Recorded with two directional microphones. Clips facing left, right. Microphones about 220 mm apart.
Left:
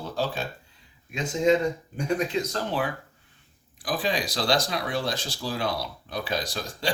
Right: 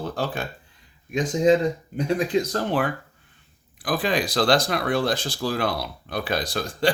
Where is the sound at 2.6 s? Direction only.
55° right (ahead or behind).